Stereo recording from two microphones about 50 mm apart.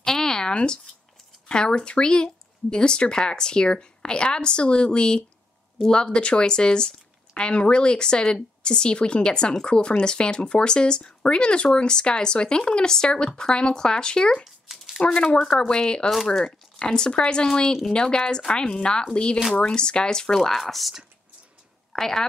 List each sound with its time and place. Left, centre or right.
0.0 s a sound: centre
1.5 s a woman's voice: centre
14.4 s a sound: centre
15.0 s speech: left
15.4 s a woman's voice: centre
16.1 s a woman's voice: centre
21.9 s a woman's voice: centre